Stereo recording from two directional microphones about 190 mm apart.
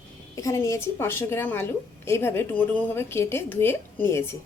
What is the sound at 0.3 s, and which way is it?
A woman's voice, 15° left (ahead or behind).